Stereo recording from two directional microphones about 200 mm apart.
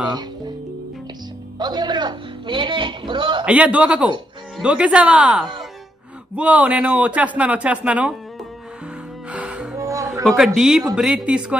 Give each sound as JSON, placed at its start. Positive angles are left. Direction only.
{"t": 1.6, "sound": "a man's voice", "side_deg": -20}
{"t": 3.4, "sound": "speech", "side_deg": -5}
{"t": 9.3, "sound": "music", "side_deg": -5}
{"t": 9.8, "sound": "a sound", "side_deg": -15}
{"t": 10.2, "sound": "speech", "side_deg": 0}